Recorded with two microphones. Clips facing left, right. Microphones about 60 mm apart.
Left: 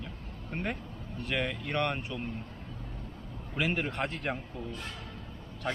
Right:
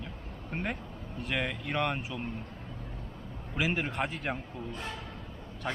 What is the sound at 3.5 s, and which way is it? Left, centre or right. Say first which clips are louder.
Speech: even; centre.